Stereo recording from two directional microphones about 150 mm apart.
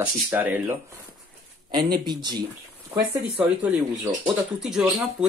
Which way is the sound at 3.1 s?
10° right (ahead or behind).